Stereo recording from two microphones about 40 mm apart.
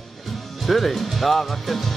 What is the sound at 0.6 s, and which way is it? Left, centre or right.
Speech, centre.